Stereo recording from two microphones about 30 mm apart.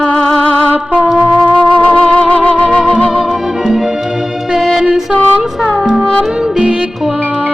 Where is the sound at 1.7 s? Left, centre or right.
Left.